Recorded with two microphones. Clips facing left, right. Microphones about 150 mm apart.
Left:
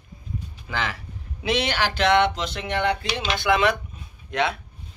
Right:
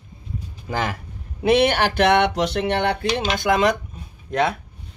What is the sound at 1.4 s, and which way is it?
Speech, 55° right (ahead or behind).